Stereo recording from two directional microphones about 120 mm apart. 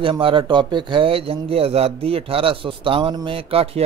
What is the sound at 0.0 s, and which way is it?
A man's voice, 45° right (ahead or behind).